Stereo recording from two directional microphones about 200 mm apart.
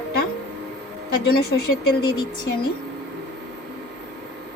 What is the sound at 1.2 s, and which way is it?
Speech, 50° left (ahead or behind).